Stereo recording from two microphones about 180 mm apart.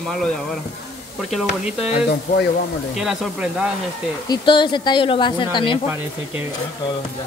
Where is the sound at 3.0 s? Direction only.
5° right (ahead or behind).